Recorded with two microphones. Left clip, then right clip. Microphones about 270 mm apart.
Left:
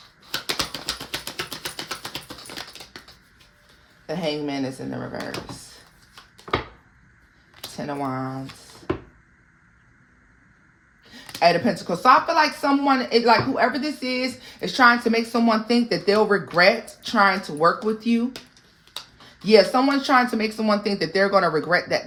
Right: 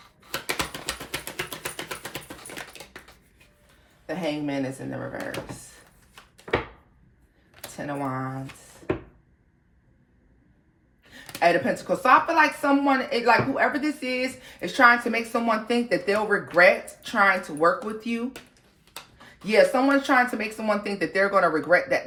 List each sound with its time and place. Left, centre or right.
0.3 s a sound: centre
4.0 s speech: left
7.8 s speech: left
11.1 s speech: left
19.5 s speech: left